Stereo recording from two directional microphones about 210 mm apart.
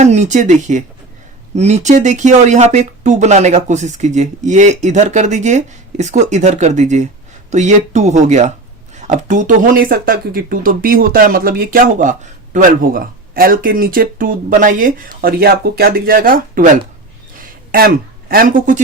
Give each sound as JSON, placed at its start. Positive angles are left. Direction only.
{"t": 0.0, "sound": "speech", "side_deg": -35}